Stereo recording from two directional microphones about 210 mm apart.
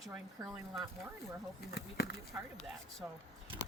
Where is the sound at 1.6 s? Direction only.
50° left (ahead or behind).